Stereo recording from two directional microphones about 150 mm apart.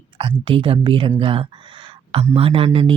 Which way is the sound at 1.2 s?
35° right (ahead or behind).